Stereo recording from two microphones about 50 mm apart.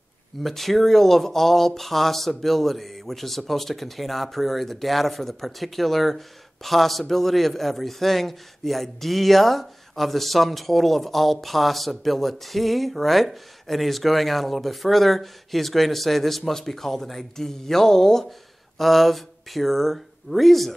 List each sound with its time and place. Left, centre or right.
0.4 s speech: centre